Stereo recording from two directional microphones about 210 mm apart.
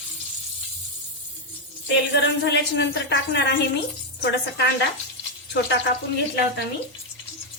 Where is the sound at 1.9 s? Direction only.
55° left (ahead or behind).